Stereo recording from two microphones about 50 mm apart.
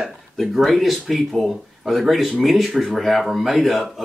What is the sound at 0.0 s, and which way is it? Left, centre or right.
Speech, centre.